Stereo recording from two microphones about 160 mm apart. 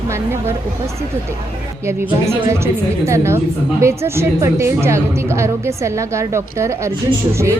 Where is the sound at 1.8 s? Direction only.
15° right (ahead or behind).